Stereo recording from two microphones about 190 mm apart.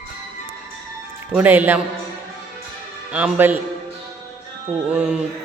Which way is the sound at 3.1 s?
10° right (ahead or behind).